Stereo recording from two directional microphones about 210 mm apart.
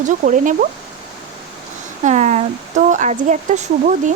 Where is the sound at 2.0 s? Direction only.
35° right (ahead or behind).